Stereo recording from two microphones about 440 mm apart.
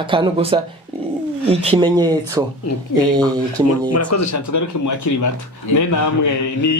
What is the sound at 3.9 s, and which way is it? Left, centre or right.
Speech, left.